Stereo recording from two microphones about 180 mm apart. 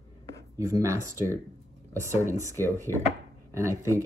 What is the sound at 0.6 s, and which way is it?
Speech, 15° right (ahead or behind).